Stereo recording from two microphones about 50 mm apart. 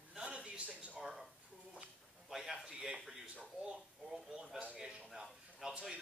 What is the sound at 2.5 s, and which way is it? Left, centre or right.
Speech, centre.